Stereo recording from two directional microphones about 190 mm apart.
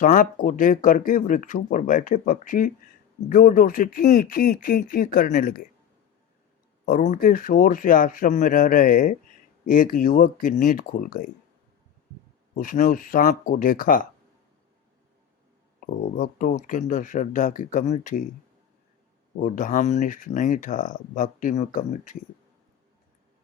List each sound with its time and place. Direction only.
0.0 s speech: 45° left (ahead or behind)
6.8 s speech: 45° left (ahead or behind)
12.5 s speech: 45° left (ahead or behind)
15.8 s speech: 50° left (ahead or behind)
19.4 s speech: 45° left (ahead or behind)